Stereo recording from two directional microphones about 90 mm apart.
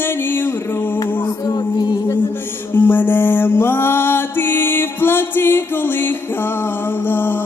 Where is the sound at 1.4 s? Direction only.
50° left (ahead or behind).